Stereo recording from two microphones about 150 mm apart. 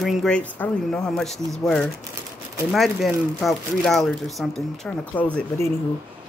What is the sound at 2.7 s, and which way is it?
Speech, centre (ahead or behind).